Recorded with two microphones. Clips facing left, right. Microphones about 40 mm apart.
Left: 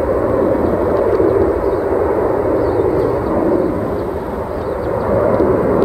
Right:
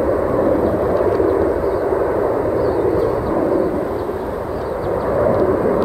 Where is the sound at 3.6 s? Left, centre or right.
Centre.